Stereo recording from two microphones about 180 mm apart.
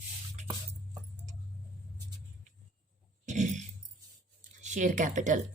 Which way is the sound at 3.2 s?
40° right (ahead or behind).